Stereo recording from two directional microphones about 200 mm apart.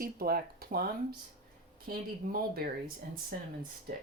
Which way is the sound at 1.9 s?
50° right (ahead or behind).